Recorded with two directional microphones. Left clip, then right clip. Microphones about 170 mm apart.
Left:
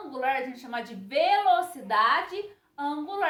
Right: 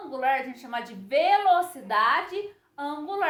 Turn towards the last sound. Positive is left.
turn(degrees=-20)  # may be behind; listen again after turning